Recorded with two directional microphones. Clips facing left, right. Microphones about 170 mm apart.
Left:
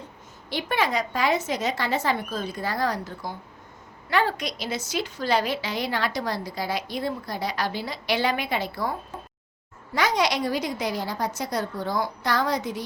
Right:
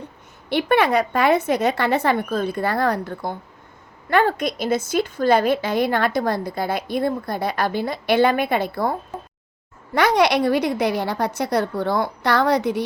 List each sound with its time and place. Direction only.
0.5 s a woman's voice: 60° right (ahead or behind)